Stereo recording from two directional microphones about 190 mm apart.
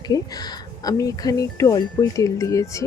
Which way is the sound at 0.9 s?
20° left (ahead or behind).